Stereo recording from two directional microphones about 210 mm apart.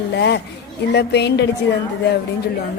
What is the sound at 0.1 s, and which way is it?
A woman's voice, 55° left (ahead or behind).